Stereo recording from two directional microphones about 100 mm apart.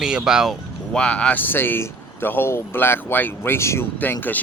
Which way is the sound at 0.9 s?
10° left (ahead or behind).